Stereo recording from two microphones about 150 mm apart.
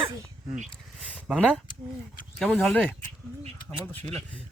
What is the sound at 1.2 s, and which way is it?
Speech, centre (ahead or behind).